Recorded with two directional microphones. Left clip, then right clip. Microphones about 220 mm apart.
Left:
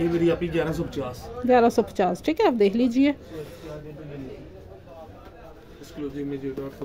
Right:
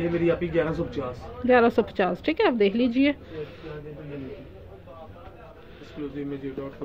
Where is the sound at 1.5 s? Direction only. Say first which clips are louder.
Left 1 dB; 20° left (ahead or behind).